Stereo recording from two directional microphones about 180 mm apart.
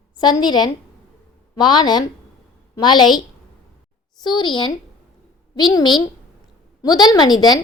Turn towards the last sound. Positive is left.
turn(degrees=25)  # may be behind; listen again after turning